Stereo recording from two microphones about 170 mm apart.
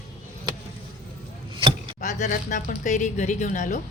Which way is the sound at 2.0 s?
45° left (ahead or behind).